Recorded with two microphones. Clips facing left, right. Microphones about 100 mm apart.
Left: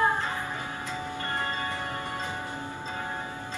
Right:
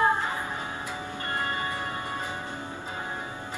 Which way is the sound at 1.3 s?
15° right (ahead or behind).